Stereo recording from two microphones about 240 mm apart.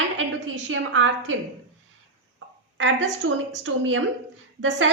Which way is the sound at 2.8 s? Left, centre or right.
Right.